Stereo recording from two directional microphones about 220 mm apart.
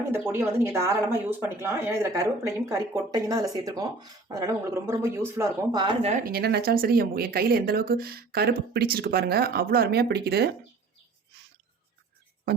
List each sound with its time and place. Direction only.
0.1 s speech: 10° right (ahead or behind); by 10.5 s 45° right (ahead or behind)